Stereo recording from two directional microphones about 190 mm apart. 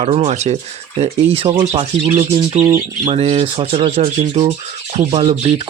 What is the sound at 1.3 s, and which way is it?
Speech, 25° right (ahead or behind).